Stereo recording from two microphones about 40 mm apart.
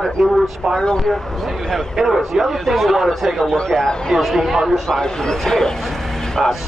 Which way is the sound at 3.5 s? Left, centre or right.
Centre.